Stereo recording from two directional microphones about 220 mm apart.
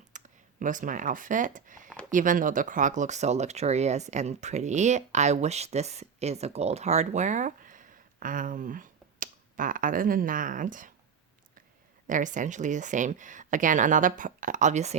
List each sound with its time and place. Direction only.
0.1 s a sound: 35° right (ahead or behind)
0.6 s speech: 35° right (ahead or behind)
12.0 s speech: 35° right (ahead or behind)